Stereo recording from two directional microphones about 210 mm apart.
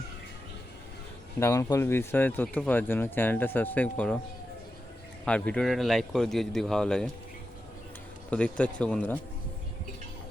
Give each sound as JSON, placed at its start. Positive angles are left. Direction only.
{"t": 1.4, "sound": "speech", "side_deg": 15}
{"t": 5.2, "sound": "speech", "side_deg": 5}
{"t": 8.3, "sound": "speech", "side_deg": 5}